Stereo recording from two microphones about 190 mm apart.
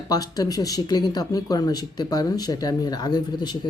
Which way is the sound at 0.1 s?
20° left (ahead or behind).